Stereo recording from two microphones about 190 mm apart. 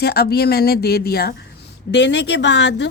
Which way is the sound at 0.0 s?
55° left (ahead or behind).